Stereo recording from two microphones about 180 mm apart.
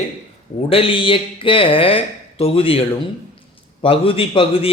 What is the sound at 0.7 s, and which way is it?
A man's voice, 30° left (ahead or behind).